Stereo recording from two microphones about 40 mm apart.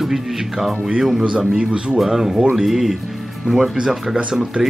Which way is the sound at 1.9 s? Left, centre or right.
Centre.